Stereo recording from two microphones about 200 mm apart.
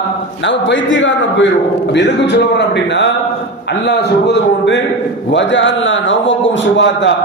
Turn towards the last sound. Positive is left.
turn(degrees=65)  # may be behind; listen again after turning